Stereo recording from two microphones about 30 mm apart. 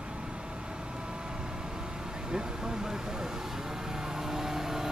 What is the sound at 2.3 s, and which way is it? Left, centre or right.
Vehicle, centre.